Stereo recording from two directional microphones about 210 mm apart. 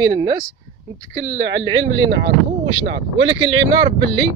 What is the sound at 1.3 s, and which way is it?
Speech, 50° right (ahead or behind).